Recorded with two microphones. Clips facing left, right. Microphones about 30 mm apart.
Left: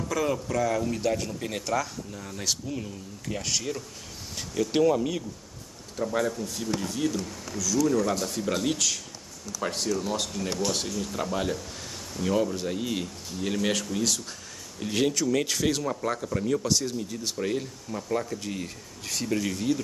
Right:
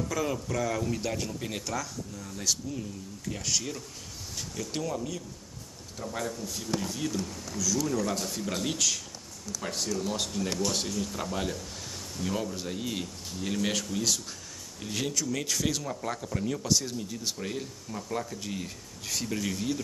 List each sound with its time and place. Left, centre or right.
0.1 s speech: centre
1.7 s speech: left
3.3 s speech: centre
4.4 s speech: left
5.9 s speech: centre
14.8 s speech: centre